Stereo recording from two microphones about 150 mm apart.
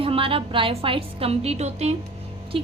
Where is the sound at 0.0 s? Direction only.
35° right (ahead or behind).